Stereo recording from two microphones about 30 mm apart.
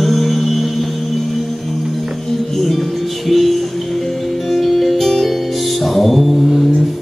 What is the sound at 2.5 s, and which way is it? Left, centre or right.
Music, centre.